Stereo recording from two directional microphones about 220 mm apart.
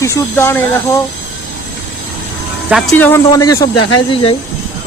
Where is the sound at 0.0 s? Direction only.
10° left (ahead or behind).